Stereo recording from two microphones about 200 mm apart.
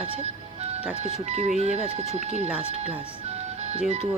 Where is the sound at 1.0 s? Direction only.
35° right (ahead or behind).